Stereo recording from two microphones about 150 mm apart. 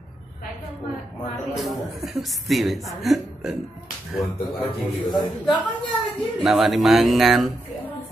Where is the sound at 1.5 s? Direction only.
Centre (ahead or behind).